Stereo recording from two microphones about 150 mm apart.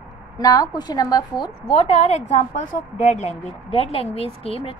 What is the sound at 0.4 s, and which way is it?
A woman's voice, 25° left (ahead or behind).